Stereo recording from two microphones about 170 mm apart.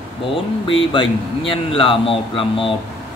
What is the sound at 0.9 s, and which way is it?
Speech, 30° left (ahead or behind).